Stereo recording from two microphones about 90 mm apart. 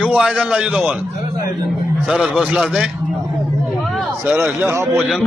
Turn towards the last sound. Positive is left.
turn(degrees=-30)  # may be behind; listen again after turning